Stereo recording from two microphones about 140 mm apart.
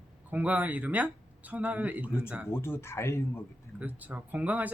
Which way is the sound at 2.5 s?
20° left (ahead or behind).